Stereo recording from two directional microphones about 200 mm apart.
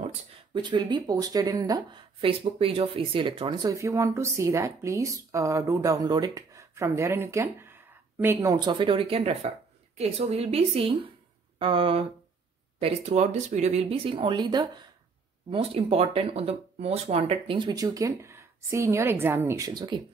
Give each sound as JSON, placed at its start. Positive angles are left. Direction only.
{"t": 0.6, "sound": "speech", "side_deg": -25}